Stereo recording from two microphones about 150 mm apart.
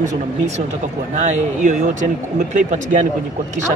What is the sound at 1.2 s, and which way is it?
Speech, 55° right (ahead or behind).